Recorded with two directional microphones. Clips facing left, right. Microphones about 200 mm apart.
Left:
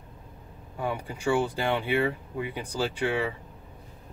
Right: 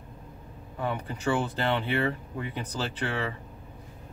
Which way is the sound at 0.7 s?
10° left (ahead or behind).